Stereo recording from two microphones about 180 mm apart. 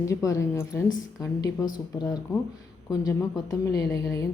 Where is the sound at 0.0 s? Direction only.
15° left (ahead or behind).